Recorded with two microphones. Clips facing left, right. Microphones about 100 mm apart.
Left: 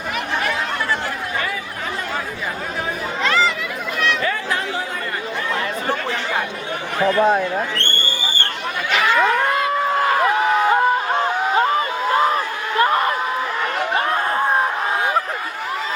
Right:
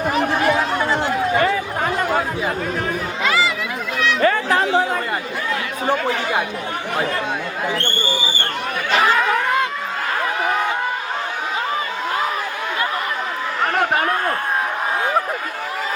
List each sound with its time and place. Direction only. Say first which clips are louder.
1.8 s chatter: right 6 dB; 55° right (ahead or behind)
3.2 s chatter: left 1 dB; 5° right (ahead or behind)
4.2 s chatter: right 6 dB; 50° right (ahead or behind)
7.2 s speech: left 9 dB; 40° left (ahead or behind)
8.9 s a sound: right 2 dB; 35° right (ahead or behind)